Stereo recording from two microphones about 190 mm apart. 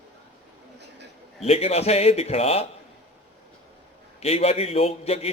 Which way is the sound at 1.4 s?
30° left (ahead or behind).